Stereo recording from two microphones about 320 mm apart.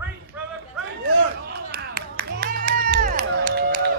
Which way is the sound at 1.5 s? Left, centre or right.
Right.